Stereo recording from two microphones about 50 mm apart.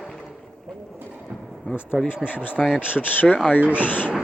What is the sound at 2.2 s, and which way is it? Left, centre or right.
Speech, left.